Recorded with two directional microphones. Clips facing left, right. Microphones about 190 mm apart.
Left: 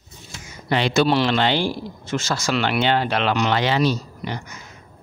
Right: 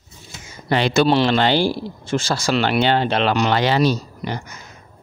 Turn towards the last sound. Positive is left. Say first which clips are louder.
# right 2 dB
turn(degrees=-40)  # may be behind; listen again after turning